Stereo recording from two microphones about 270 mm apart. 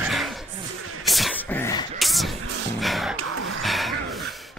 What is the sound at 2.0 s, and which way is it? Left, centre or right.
Music, centre.